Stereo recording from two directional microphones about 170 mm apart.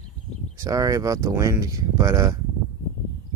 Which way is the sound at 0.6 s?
20° right (ahead or behind).